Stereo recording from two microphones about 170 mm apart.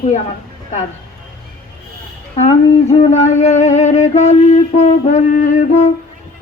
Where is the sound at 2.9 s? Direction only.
40° left (ahead or behind).